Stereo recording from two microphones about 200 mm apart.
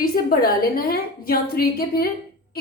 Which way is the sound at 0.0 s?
45° left (ahead or behind).